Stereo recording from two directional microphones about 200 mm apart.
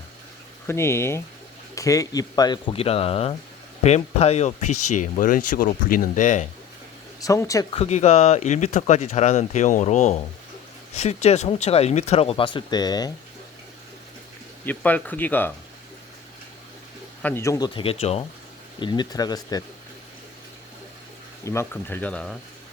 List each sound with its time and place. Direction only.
0.7 s speech: 15° left (ahead or behind); by 6.5 s 40° left (ahead or behind)
7.2 s speech: 15° left (ahead or behind)
7.7 s speech: 35° left (ahead or behind)
14.6 s speech: 10° left (ahead or behind)
17.2 s speech: 15° left (ahead or behind)
17.7 s speech: 30° left (ahead or behind)
21.4 s speech: 15° left (ahead or behind)